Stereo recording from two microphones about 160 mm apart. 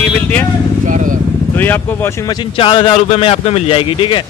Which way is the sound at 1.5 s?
10° left (ahead or behind).